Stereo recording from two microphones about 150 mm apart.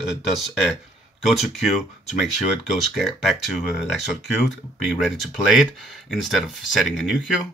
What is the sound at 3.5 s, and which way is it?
Speech, centre (ahead or behind).